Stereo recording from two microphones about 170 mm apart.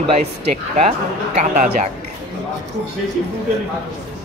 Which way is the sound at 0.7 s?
40° right (ahead or behind).